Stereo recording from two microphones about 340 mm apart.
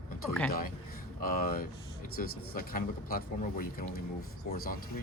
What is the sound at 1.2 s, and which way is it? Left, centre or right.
Speech, left.